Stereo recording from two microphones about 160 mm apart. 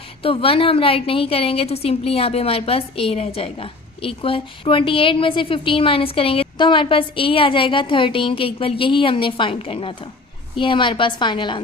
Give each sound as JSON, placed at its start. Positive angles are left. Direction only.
{"t": 0.2, "sound": "a woman's voice", "side_deg": 35}